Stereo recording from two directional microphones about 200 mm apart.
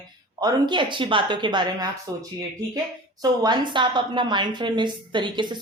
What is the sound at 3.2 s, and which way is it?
Speech, 20° right (ahead or behind).